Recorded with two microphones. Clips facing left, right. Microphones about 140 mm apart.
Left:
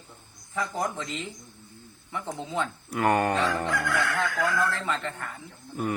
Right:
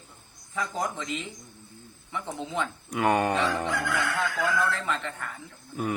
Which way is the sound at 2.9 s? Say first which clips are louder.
Even; 5° right (ahead or behind).